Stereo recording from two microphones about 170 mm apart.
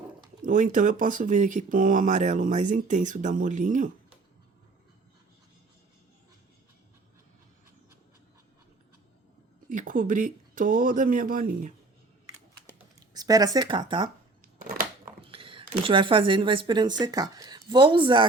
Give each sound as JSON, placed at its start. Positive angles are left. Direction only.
{"t": 0.4, "sound": "speech", "side_deg": -50}
{"t": 9.6, "sound": "speech", "side_deg": -55}
{"t": 13.1, "sound": "speech", "side_deg": -20}
{"t": 14.4, "sound": "a sound", "side_deg": -55}
{"t": 15.2, "sound": "speech", "side_deg": -35}